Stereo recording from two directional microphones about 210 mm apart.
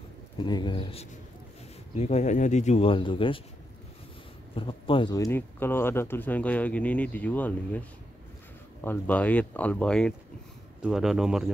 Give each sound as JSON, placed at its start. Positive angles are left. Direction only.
{"t": 0.4, "sound": "speech", "side_deg": 20}
{"t": 4.6, "sound": "speech", "side_deg": 25}
{"t": 8.8, "sound": "speech", "side_deg": 10}